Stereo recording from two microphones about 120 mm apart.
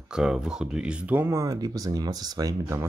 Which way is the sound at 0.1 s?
5° right (ahead or behind).